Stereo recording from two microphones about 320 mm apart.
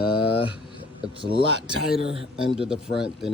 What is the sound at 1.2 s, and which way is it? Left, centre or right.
Speech, centre.